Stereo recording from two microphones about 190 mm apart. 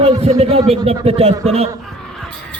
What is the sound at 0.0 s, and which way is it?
Speech, 30° right (ahead or behind).